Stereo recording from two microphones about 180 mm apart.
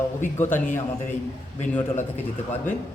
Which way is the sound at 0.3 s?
10° left (ahead or behind).